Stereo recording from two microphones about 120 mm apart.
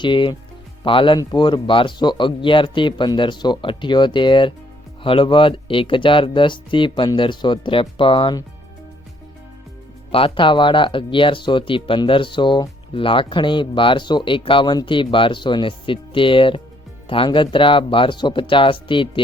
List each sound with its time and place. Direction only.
0.0 s speech: 40° left (ahead or behind)
10.1 s speech: 50° left (ahead or behind)